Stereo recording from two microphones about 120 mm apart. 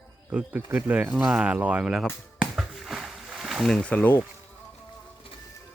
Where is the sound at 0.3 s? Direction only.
10° right (ahead or behind).